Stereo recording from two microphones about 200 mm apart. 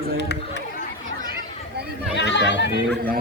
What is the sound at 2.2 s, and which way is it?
Chatter, 60° left (ahead or behind).